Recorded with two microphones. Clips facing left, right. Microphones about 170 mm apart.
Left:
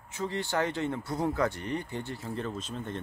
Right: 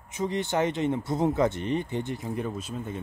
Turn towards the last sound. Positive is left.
turn(degrees=-5)  # may be behind; listen again after turning